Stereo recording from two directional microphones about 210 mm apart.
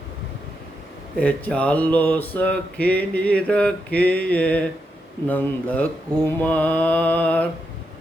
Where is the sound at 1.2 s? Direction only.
5° left (ahead or behind).